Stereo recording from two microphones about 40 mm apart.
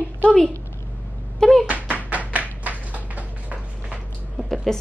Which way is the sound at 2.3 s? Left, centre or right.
Right.